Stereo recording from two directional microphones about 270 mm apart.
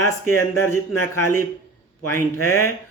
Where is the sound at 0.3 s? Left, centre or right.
Centre.